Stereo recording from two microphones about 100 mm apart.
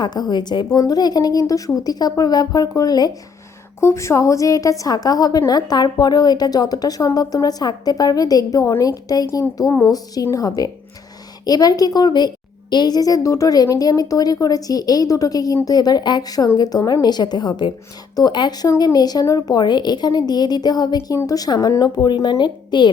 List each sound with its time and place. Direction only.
0.0 s a woman's voice: 45° left (ahead or behind)
3.8 s a woman's voice: 30° left (ahead or behind); by 22.9 s 50° left (ahead or behind)